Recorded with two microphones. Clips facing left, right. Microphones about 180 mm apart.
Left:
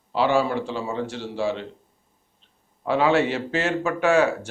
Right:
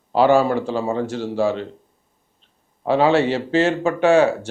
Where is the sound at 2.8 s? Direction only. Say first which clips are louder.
Right 4 dB; 30° right (ahead or behind).